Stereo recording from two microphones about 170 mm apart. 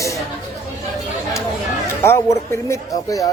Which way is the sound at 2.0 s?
15° left (ahead or behind).